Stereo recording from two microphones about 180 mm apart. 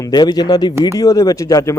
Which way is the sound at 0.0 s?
20° left (ahead or behind).